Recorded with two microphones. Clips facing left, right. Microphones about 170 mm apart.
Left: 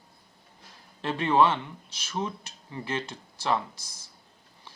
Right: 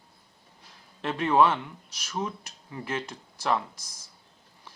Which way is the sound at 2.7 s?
5° right (ahead or behind).